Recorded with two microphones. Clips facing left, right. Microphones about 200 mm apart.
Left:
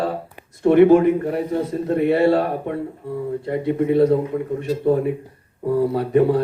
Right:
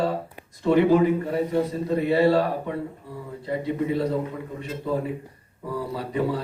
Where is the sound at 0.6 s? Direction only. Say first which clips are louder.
Left 6 dB; 55° left (ahead or behind).